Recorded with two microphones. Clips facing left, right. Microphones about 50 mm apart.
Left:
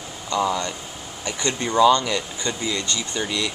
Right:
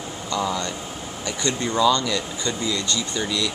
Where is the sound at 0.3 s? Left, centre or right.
Centre.